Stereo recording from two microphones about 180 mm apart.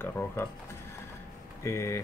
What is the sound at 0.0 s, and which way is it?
Speech, 10° left (ahead or behind).